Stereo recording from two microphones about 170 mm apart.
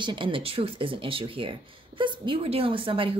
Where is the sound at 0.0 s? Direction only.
30° right (ahead or behind).